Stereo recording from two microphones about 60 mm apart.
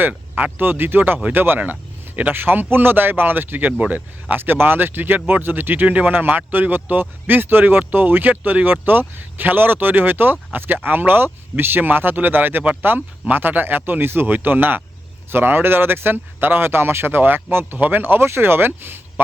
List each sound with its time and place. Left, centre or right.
0.0 s speech: right
3.7 s speech: right
4.4 s speech: right